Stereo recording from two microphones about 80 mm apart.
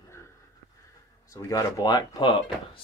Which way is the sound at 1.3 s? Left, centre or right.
Left.